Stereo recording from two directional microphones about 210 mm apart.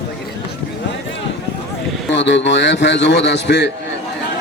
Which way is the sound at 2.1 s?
55° left (ahead or behind).